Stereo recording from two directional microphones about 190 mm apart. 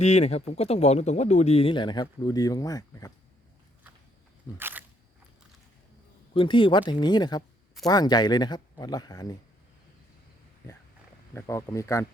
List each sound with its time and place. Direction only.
0.0 s speech: 35° left (ahead or behind); by 3.1 s 20° left (ahead or behind)
4.5 s speech: 10° right (ahead or behind)
6.3 s speech: 25° left (ahead or behind)
11.3 s speech: 15° left (ahead or behind)